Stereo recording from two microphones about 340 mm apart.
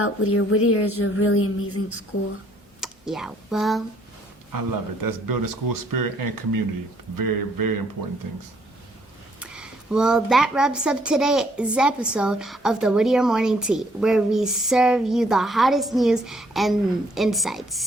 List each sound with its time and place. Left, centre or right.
0.0 s speech: left
2.8 s speech: centre
4.5 s speech: right
9.4 s speech: centre